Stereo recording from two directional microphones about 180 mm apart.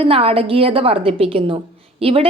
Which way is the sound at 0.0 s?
30° right (ahead or behind).